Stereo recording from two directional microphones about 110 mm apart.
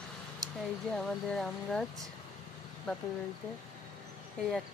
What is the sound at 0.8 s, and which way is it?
Speech, 5° left (ahead or behind).